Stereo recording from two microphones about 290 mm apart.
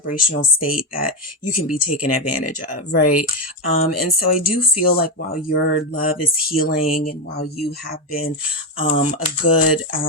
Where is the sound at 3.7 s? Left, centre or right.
Left.